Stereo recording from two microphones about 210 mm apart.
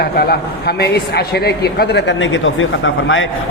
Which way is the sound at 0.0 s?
45° left (ahead or behind).